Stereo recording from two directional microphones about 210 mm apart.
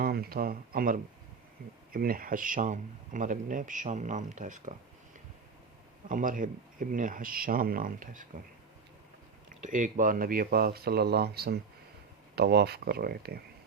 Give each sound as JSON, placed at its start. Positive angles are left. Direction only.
{"t": 0.0, "sound": "speech", "side_deg": -45}
{"t": 6.1, "sound": "speech", "side_deg": -40}
{"t": 9.5, "sound": "speech", "side_deg": -40}